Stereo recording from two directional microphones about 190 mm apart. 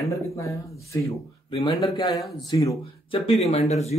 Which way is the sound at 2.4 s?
15° left (ahead or behind).